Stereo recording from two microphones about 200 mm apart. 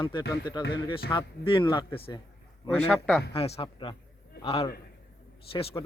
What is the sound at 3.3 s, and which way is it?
Speech, 30° left (ahead or behind).